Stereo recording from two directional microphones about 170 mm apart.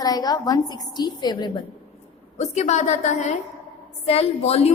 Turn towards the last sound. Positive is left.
turn(degrees=35)  # may be behind; listen again after turning